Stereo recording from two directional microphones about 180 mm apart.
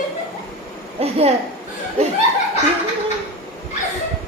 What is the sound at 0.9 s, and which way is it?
Speech, 35° right (ahead or behind).